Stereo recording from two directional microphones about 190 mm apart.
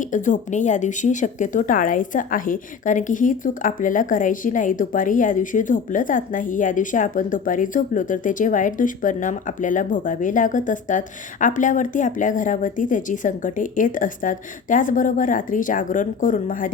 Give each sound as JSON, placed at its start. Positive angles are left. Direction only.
{"t": 0.0, "sound": "speech", "side_deg": 40}